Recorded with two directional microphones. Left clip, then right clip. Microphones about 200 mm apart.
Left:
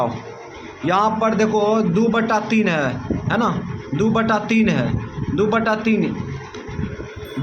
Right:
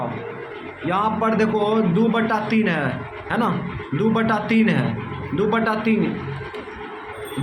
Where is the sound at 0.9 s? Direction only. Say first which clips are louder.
Left 4 dB; 25° left (ahead or behind).